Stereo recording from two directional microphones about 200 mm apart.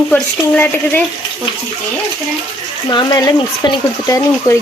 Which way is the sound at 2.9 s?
20° left (ahead or behind).